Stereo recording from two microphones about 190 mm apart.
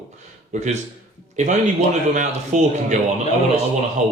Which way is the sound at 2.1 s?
40° right (ahead or behind).